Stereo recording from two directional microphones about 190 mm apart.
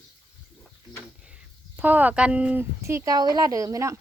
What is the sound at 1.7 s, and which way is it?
Speech, 10° right (ahead or behind).